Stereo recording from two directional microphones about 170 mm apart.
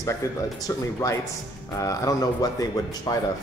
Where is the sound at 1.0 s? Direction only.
20° left (ahead or behind).